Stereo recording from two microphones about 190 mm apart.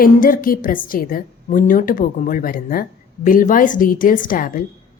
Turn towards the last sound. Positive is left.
turn(degrees=45)  # may be behind; listen again after turning